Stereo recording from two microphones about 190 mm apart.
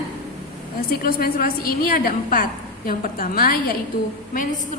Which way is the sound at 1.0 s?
50° left (ahead or behind).